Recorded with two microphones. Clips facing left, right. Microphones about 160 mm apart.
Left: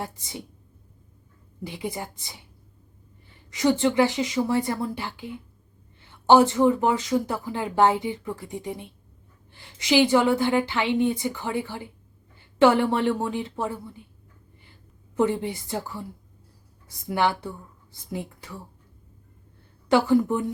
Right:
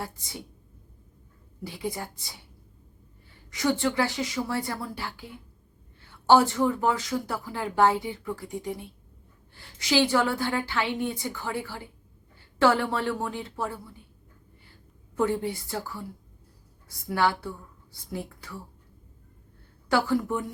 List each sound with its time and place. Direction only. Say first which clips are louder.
0.0 s speech: left 3 dB; 20° left (ahead or behind)
1.6 s speech: left 1 dB; 20° left (ahead or behind)
3.5 s speech: left 5 dB; 20° left (ahead or behind)
15.1 s speech: left 3 dB; 20° left (ahead or behind)
17.1 s speech: left 2 dB; 20° left (ahead or behind)
19.9 s speech: left 5 dB; 20° left (ahead or behind)